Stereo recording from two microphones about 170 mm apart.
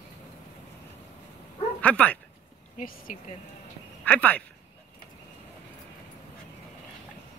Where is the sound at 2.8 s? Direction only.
50° left (ahead or behind).